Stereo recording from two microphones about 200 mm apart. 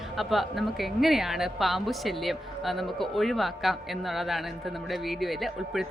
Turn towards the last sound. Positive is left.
turn(degrees=0)  # may be behind; listen again after turning